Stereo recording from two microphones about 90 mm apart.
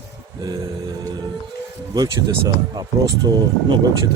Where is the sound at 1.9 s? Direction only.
45° right (ahead or behind).